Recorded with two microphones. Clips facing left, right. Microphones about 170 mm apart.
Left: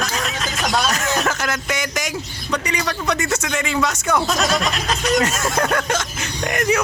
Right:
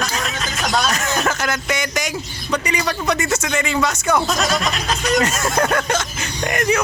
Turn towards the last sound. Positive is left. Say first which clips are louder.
# even
turn(degrees=0)  # may be behind; listen again after turning